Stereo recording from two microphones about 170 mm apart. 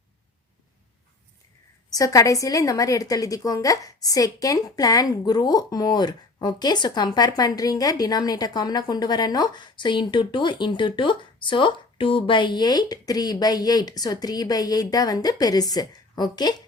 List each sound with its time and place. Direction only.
1.9 s a woman's voice: 20° left (ahead or behind)